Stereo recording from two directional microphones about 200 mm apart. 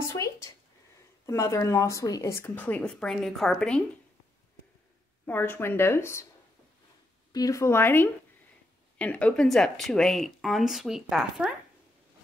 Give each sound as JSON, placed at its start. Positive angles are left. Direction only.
{"t": 0.0, "sound": "a sound", "side_deg": 15}
{"t": 1.2, "sound": "speech", "side_deg": 15}
{"t": 5.2, "sound": "speech", "side_deg": 10}
{"t": 7.3, "sound": "speech", "side_deg": 15}